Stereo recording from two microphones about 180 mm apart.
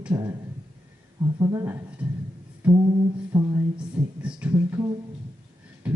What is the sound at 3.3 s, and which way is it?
Speech, 20° right (ahead or behind).